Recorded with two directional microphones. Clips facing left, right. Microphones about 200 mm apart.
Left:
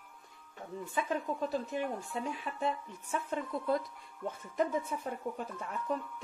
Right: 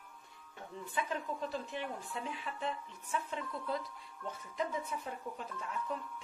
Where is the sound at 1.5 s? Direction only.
45° left (ahead or behind).